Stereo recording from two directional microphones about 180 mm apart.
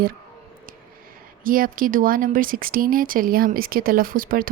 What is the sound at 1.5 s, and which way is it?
A woman's voice, 50° right (ahead or behind).